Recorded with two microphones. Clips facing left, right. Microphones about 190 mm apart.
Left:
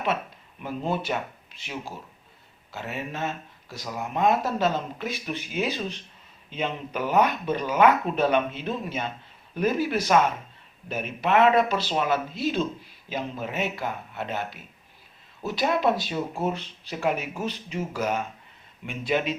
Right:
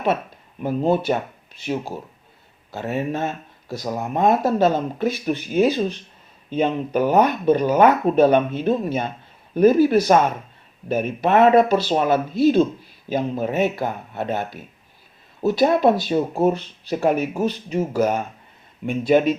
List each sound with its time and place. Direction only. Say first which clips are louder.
0.6 s speech: right 9 dB; 40° right (ahead or behind)